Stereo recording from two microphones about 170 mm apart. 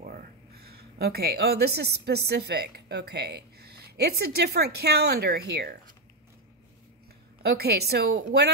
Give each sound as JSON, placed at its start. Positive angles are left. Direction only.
{"t": 0.0, "sound": "speech", "side_deg": -60}
{"t": 7.4, "sound": "a woman's voice", "side_deg": -70}